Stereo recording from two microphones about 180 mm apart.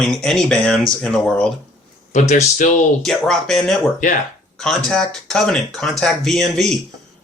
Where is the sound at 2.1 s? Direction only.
40° left (ahead or behind).